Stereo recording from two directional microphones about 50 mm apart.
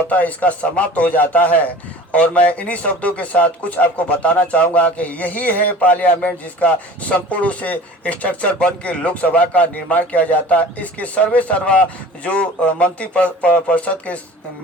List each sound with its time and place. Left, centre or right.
0.1 s a man's voice: left